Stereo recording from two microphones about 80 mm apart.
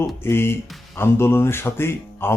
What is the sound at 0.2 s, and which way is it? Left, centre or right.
Speech, left.